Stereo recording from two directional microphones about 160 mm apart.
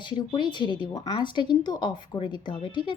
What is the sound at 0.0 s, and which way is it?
Speech, 30° left (ahead or behind).